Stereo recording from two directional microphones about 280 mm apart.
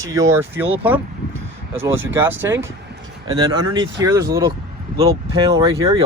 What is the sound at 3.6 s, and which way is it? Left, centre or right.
Speech, right.